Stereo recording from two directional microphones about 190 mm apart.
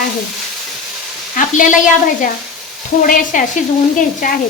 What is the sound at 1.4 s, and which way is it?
Speech, 45° left (ahead or behind).